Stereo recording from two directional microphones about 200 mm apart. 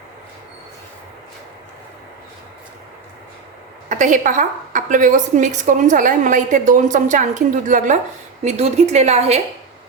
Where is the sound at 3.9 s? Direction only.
40° right (ahead or behind).